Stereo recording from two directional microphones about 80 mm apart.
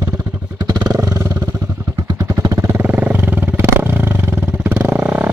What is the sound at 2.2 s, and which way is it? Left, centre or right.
Vehicle, right.